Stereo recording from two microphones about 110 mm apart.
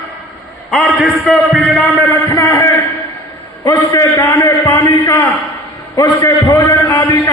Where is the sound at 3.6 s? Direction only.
30° left (ahead or behind).